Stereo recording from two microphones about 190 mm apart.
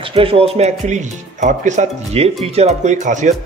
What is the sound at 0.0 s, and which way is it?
Speech, 30° right (ahead or behind).